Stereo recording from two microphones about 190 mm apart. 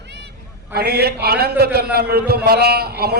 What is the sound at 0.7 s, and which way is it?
A man's voice, 55° right (ahead or behind).